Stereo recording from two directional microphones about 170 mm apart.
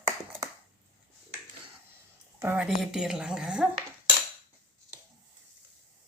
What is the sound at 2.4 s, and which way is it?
A woman's voice, 10° right (ahead or behind).